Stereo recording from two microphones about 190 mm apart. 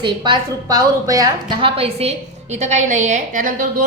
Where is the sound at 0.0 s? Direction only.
25° right (ahead or behind).